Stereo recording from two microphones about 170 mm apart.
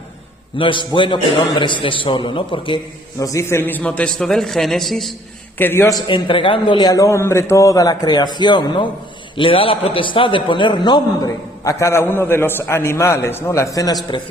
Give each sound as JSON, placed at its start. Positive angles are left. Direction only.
{"t": 0.5, "sound": "a man's voice", "side_deg": 30}
{"t": 3.2, "sound": "a man's voice", "side_deg": 20}
{"t": 5.5, "sound": "a man's voice", "side_deg": 15}
{"t": 6.1, "sound": "a man's voice", "side_deg": 30}